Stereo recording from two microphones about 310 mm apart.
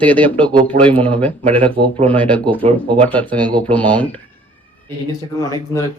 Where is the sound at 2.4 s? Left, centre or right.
Centre.